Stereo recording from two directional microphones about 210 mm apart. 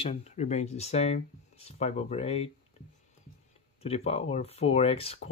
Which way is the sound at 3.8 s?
30° left (ahead or behind).